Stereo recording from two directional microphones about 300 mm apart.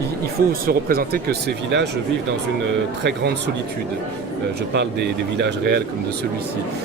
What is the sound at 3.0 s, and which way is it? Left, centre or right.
Speech, right.